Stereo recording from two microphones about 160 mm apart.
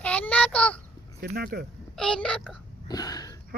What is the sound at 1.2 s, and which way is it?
Speech, 75° right (ahead or behind).